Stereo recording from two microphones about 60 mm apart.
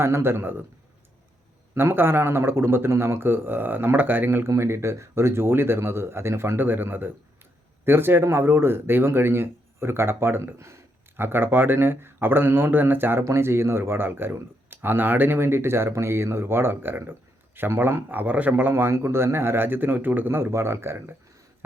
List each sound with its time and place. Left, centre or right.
0.0 s speech: right
1.7 s speech: right
4.5 s speech: right
11.2 s speech: right
13.2 s speech: right
18.7 s speech: right